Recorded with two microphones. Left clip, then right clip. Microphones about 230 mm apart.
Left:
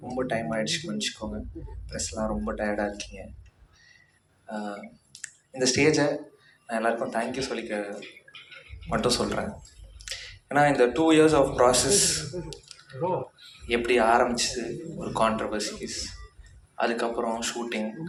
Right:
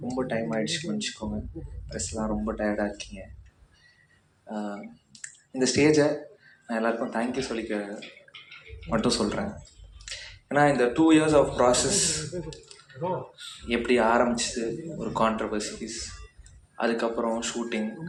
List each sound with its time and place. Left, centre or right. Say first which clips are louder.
0.2 s speech: left 1 dB; left
4.5 s speech: even; left
5.1 s clicking: right 1 dB; left
6.7 s speech: left 1 dB; left